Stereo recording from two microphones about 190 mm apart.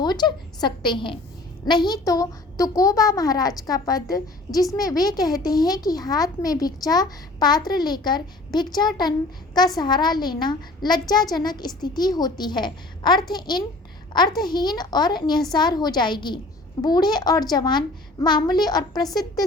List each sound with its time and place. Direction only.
0.0 s a woman's voice: 25° left (ahead or behind)